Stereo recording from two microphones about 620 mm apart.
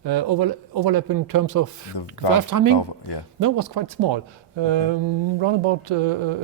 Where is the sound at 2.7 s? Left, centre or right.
Left.